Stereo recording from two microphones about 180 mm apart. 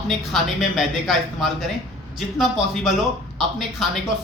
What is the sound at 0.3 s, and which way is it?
Speech, centre (ahead or behind).